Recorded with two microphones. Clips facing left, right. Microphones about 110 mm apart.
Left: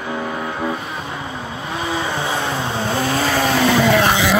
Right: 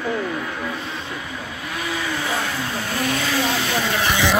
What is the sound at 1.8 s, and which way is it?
Vehicle, 30° left (ahead or behind).